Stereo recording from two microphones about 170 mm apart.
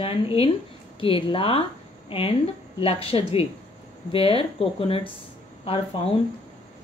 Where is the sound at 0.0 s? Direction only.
35° left (ahead or behind).